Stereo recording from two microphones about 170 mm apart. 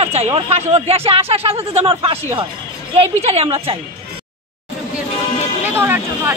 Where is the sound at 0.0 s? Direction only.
40° right (ahead or behind).